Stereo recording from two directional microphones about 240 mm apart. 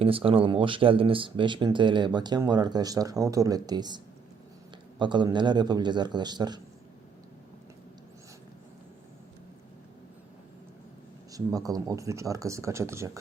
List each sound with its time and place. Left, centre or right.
0.0 s speech: right
11.3 s speech: centre